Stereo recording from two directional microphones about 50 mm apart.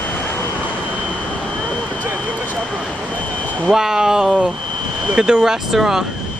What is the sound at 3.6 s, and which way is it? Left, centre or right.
Speech, centre.